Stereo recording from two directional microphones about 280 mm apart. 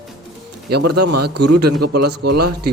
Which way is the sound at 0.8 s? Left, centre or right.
Right.